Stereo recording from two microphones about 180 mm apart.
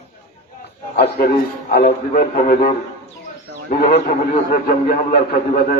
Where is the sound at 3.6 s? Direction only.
40° left (ahead or behind).